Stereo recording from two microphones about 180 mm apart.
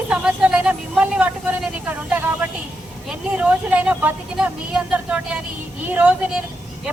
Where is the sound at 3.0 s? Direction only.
5° right (ahead or behind).